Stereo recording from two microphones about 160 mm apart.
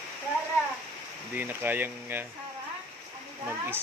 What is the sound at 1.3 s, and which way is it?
Speech, 10° right (ahead or behind).